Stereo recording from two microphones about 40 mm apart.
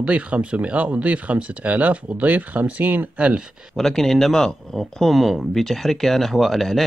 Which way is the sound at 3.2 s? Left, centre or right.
Right.